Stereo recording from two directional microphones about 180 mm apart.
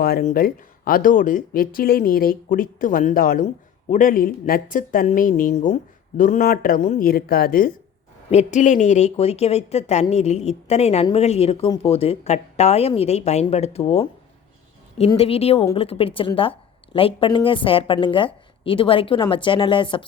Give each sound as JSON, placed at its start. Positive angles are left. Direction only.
{"t": 0.0, "sound": "a woman's voice", "side_deg": 55}
{"t": 8.3, "sound": "speech", "side_deg": 40}
{"t": 15.2, "sound": "a woman's voice", "side_deg": 35}